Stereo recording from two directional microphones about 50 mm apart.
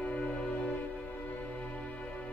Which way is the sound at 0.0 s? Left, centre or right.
Centre.